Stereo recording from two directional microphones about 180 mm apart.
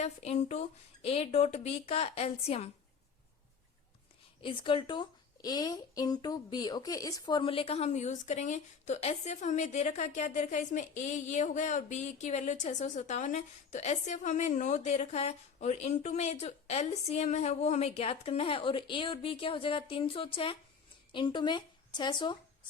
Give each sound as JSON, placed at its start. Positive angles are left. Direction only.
{"t": 0.0, "sound": "a woman's voice", "side_deg": 35}
{"t": 4.4, "sound": "speech", "side_deg": 30}
{"t": 7.3, "sound": "a woman's voice", "side_deg": 30}